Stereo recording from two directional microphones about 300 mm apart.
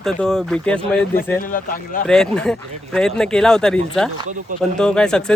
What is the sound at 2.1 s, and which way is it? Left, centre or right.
Speech, centre.